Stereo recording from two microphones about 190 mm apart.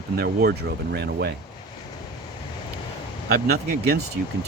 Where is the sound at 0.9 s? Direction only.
60° right (ahead or behind).